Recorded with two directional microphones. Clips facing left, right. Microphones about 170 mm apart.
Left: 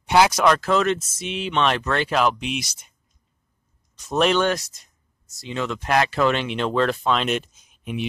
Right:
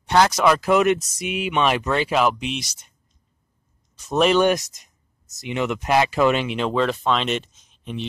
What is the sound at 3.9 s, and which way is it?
Speech, 5° right (ahead or behind).